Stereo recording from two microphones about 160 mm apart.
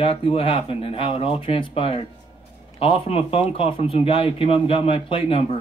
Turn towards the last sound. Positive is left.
turn(degrees=35)  # may be behind; listen again after turning